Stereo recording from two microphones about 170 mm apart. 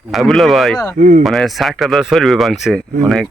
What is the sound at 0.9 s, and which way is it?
Speech, 50° right (ahead or behind).